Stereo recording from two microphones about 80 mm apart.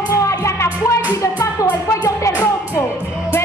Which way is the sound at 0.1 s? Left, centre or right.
Left.